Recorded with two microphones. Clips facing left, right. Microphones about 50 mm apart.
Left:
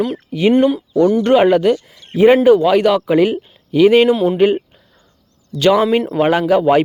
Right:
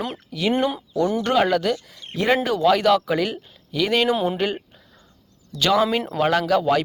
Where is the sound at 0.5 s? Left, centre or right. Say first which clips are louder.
Left 9 dB; centre.